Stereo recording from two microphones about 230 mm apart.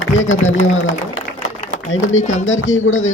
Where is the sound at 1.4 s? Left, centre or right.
Left.